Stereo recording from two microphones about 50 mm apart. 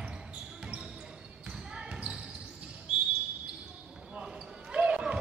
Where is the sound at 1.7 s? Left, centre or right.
Centre.